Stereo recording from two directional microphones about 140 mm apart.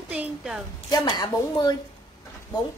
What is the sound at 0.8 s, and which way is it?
Speech, 30° left (ahead or behind).